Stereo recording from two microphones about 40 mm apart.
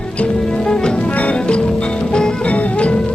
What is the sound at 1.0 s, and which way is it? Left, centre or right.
Music, left.